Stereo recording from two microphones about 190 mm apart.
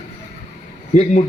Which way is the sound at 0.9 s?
35° left (ahead or behind).